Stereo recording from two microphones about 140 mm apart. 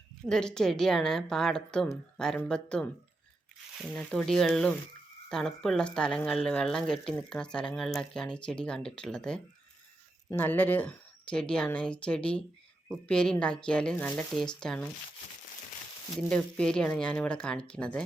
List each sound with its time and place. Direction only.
0.3 s a woman's voice: 5° left (ahead or behind)
3.9 s a woman's voice: 5° left (ahead or behind)
16.3 s speech: 5° left (ahead or behind)